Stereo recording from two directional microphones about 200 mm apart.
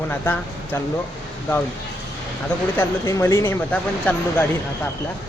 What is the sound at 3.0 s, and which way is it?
Speech, 15° left (ahead or behind).